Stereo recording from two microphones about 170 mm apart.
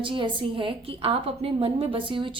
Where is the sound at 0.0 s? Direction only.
30° right (ahead or behind).